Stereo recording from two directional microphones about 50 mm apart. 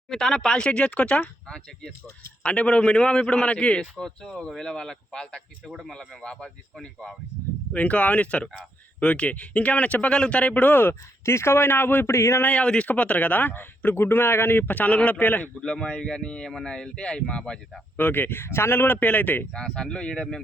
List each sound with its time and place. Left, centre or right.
0.1 s a man's voice: centre
7.7 s a man's voice: left
11.3 s a man's voice: left
12.1 s a man's voice: left
12.5 s a man's voice: left
14.7 s speech: left
15.6 s a man's voice: centre
17.9 s a man's voice: left
19.0 s speech: left
19.5 s a man's voice: centre